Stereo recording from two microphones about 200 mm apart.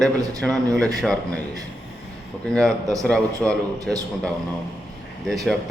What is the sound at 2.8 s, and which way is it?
Speech, 15° right (ahead or behind).